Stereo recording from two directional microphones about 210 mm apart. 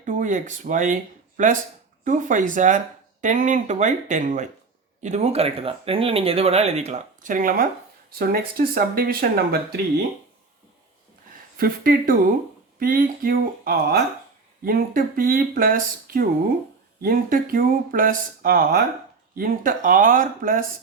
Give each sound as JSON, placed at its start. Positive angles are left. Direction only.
{"t": 0.0, "sound": "speech", "side_deg": -35}
{"t": 11.5, "sound": "speech", "side_deg": -45}